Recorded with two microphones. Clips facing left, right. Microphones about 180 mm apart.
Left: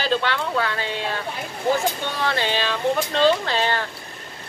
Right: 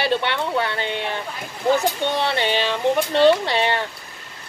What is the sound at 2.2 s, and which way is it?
Speech, 20° right (ahead or behind).